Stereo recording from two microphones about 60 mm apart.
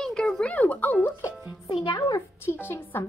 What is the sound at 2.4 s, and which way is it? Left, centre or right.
Speech, left.